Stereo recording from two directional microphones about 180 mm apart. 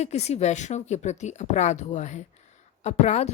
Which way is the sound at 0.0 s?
35° left (ahead or behind).